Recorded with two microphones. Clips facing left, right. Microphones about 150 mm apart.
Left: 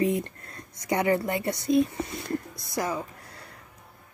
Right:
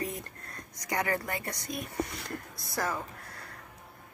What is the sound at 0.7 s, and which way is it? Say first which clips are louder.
Speech: left 7 dB; 25° left (ahead or behind).